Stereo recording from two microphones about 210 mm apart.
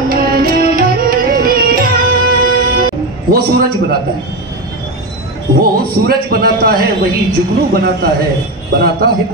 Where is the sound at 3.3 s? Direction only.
45° right (ahead or behind).